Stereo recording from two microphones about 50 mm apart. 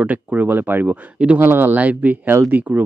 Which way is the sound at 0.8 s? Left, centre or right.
Right.